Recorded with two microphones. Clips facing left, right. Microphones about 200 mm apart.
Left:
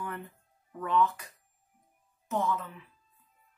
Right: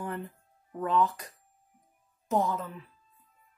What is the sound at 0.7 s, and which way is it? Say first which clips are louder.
Speech: right 1 dB; 35° right (ahead or behind).